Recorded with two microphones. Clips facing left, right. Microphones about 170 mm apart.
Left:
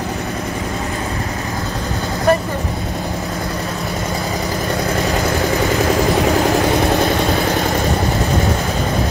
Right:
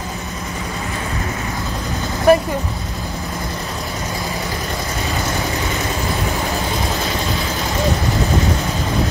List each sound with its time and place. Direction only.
2.3 s vehicle: 10° right (ahead or behind)